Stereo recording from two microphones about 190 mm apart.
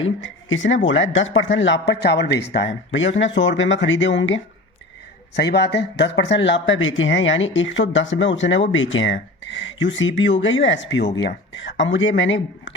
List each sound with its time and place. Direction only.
0.5 s speech: 85° left
5.3 s speech: 65° left (ahead or behind); by 12.7 s 80° left